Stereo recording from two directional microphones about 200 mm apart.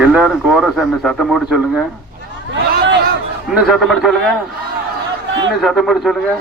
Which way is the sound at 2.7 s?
65° right (ahead or behind).